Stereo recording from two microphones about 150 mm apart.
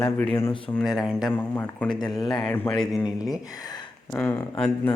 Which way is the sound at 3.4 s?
25° left (ahead or behind).